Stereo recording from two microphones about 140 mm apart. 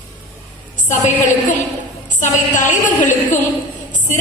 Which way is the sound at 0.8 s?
60° left (ahead or behind).